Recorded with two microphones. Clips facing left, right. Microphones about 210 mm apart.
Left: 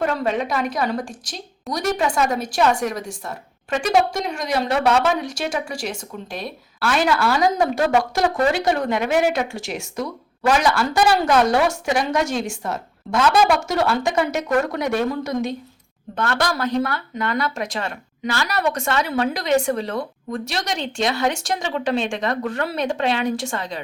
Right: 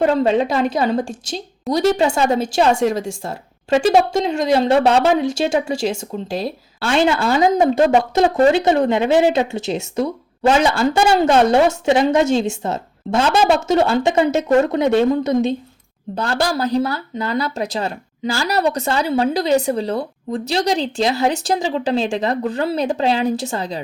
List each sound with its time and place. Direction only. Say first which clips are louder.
0.0 s speech: right 6 dB; 30° right (ahead or behind)